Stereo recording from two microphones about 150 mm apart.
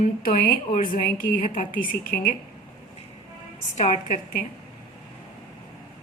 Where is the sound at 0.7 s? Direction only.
65° left (ahead or behind).